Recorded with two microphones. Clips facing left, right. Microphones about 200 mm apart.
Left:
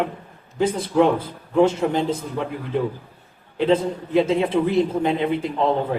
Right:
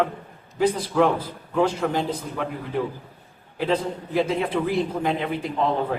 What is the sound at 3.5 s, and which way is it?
A man's voice, 25° left (ahead or behind).